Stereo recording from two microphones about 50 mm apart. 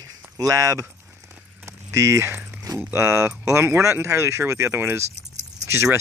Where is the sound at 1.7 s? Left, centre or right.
Right.